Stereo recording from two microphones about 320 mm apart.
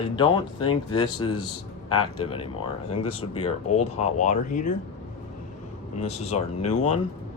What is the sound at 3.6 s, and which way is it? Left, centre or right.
Speech, left.